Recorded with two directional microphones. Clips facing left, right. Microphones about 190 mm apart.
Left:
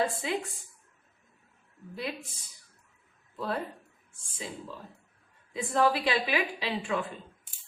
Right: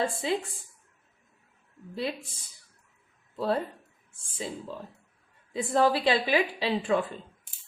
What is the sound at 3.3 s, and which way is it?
Speech, 30° right (ahead or behind).